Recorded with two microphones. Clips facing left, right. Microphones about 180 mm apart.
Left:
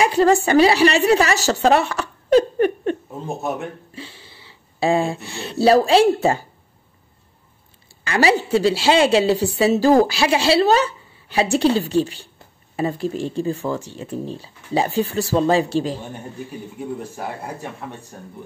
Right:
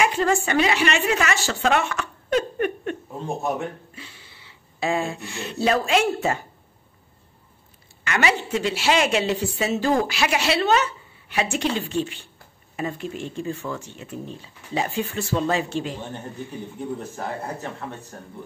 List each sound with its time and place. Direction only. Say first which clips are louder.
0.0 s a woman's voice: left 6 dB; 35° left (ahead or behind)
3.2 s a man's voice: left 1 dB; centre (ahead or behind)
3.9 s a sound: left 7 dB; 30° left (ahead or behind)
5.3 s a woman's voice: left 8 dB; 35° left (ahead or behind)
8.0 s a woman's voice: left 5 dB; 30° left (ahead or behind)
17.1 s speech: even; 10° left (ahead or behind)